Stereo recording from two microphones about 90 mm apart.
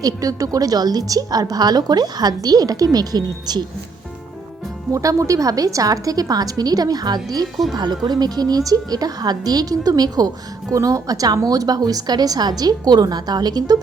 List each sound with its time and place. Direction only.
0.0 s a woman's voice: 40° right (ahead or behind)
4.9 s a woman's voice: 35° right (ahead or behind)